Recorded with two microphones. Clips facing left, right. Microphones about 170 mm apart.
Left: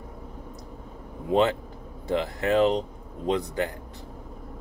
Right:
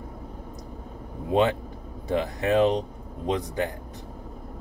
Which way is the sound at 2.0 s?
20° right (ahead or behind).